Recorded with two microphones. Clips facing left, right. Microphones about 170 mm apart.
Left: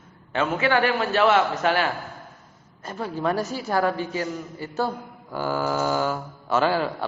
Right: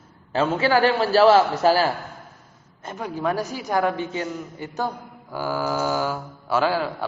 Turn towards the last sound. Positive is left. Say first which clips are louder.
# even
turn(degrees=-5)  # may be behind; listen again after turning